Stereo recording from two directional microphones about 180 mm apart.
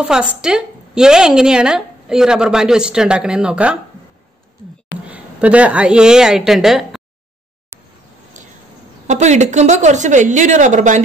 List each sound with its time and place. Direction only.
0.0 s a woman's voice: 5° right (ahead or behind)
5.0 s a woman's voice: 5° right (ahead or behind)
8.3 s a sound: 45° right (ahead or behind)
9.0 s a woman's voice: 40° right (ahead or behind)